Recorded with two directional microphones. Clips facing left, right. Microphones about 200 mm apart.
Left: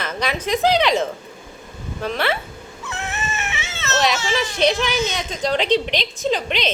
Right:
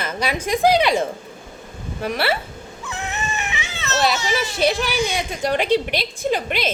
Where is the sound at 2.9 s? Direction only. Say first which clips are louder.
Even; 15° right (ahead or behind).